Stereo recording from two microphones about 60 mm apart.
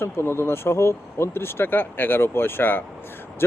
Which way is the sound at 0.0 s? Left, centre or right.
Left.